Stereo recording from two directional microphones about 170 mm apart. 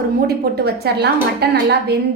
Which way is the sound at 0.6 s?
70° right (ahead or behind).